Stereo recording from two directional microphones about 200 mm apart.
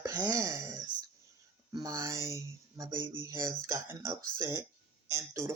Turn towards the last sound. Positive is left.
turn(degrees=-15)  # may be behind; listen again after turning